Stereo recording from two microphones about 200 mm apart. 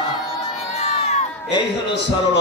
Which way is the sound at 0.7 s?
35° left (ahead or behind).